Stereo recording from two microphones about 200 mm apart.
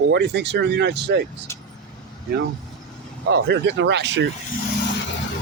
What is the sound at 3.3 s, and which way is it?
Speech, 60° right (ahead or behind).